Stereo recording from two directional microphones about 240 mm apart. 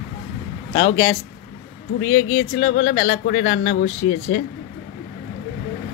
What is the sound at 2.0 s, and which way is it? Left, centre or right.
Speech, left.